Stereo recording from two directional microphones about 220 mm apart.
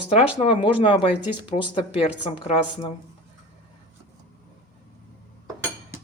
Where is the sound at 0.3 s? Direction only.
25° left (ahead or behind).